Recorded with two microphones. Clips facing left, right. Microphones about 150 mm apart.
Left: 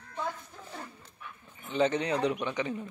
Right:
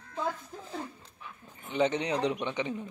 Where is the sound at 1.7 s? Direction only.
15° right (ahead or behind).